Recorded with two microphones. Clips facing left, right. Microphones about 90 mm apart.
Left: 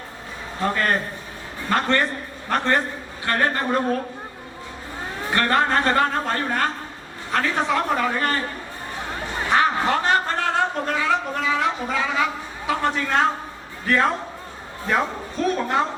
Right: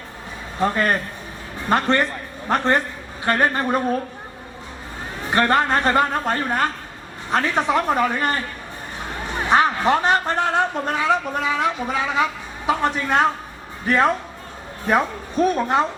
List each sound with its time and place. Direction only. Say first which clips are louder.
0.6 s a man's voice: right 2 dB; 20° right (ahead or behind)
5.3 s a man's voice: right 2 dB; 20° right (ahead or behind)
9.0 s a sound: right 1 dB; 20° right (ahead or behind)
12.6 s a man's voice: right 2 dB; 20° right (ahead or behind)